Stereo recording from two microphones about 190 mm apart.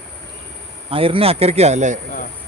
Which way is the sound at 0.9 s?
30° right (ahead or behind).